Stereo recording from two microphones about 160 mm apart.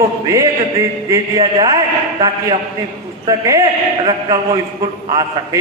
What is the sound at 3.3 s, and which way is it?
Speech, 20° right (ahead or behind).